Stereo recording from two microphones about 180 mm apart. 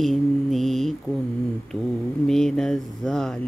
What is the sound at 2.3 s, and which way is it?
Mantra, 5° left (ahead or behind).